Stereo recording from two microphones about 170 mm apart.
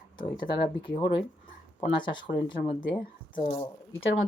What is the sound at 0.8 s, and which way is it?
Speech, 25° left (ahead or behind).